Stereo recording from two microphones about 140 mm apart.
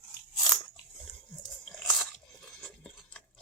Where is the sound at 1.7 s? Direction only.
Centre (ahead or behind).